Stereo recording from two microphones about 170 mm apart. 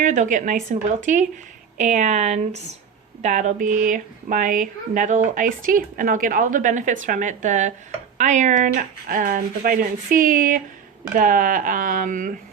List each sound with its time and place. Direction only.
0.0 s speech: 45° right (ahead or behind)